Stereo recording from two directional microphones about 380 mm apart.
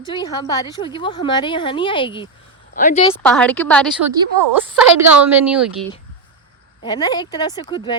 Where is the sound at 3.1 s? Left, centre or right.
Centre.